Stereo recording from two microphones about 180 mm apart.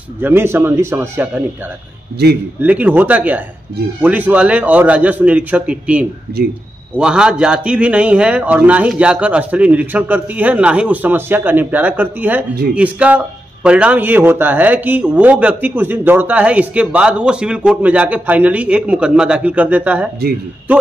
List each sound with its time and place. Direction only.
0.2 s speech: 10° right (ahead or behind)
2.2 s speech: 65° right (ahead or behind)
2.6 s speech: 10° right (ahead or behind)
6.4 s speech: 65° right (ahead or behind)
7.0 s speech: 5° right (ahead or behind)